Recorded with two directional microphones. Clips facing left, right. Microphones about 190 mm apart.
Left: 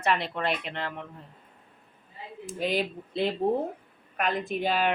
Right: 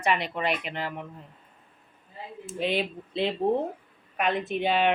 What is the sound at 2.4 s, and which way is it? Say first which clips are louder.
Speech: even; centre (ahead or behind).